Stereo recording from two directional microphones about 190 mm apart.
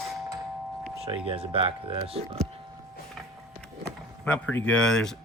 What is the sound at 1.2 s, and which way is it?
Speech, 30° right (ahead or behind).